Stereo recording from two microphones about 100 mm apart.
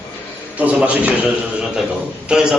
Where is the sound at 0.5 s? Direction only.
15° right (ahead or behind).